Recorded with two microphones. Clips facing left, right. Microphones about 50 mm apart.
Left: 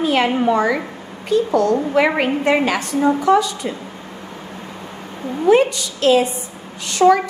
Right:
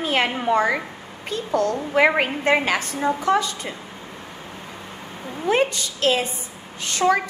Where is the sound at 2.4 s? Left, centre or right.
Right.